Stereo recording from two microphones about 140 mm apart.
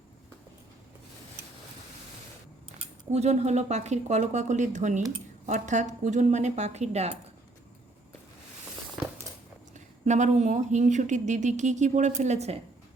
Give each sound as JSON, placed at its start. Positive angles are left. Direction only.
{"t": 3.1, "sound": "speech", "side_deg": -50}
{"t": 9.7, "sound": "speech", "side_deg": -60}